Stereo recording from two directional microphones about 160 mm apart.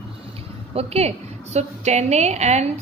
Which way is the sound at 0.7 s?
40° right (ahead or behind).